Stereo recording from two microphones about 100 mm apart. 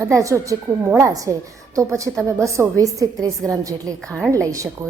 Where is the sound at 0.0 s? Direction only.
30° right (ahead or behind).